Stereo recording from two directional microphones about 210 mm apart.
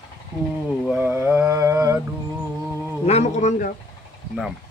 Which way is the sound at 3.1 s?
30° left (ahead or behind).